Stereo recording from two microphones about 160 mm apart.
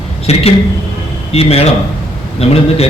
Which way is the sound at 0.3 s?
40° left (ahead or behind).